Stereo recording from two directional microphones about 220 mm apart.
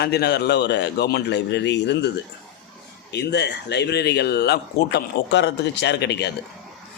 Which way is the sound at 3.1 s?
50° left (ahead or behind).